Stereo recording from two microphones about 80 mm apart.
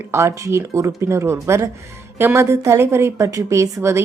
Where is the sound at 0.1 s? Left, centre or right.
Right.